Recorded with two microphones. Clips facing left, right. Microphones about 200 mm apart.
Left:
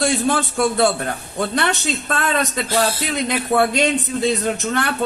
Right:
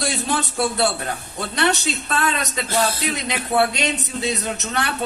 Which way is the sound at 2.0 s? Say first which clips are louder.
Left 3 dB; 50° left (ahead or behind).